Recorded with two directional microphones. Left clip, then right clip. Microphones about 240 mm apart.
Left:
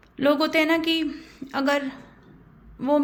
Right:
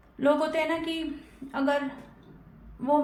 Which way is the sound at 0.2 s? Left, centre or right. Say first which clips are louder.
Left 4 dB; left.